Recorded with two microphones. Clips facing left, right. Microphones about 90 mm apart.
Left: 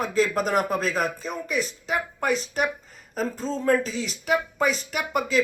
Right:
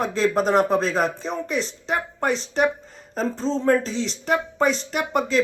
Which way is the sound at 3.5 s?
30° right (ahead or behind).